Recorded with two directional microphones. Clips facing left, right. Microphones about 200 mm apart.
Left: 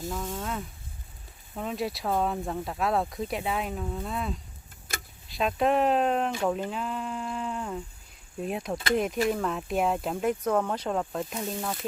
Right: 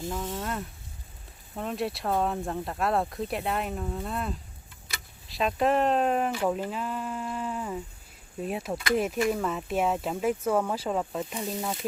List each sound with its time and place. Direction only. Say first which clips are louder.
0.1 s speech: right 1 dB; centre (ahead or behind)
4.9 s vehicle: left 5 dB; 50° left (ahead or behind)
5.3 s speech: even; centre (ahead or behind)